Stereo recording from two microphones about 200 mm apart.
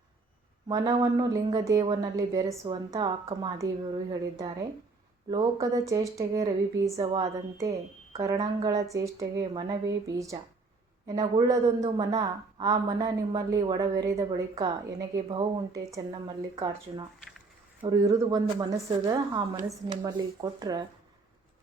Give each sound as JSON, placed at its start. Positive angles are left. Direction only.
{"t": 0.7, "sound": "a woman's voice", "side_deg": -20}